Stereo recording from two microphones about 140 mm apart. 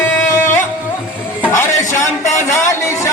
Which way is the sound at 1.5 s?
20° left (ahead or behind).